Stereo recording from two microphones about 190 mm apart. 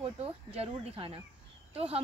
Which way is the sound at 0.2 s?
30° right (ahead or behind).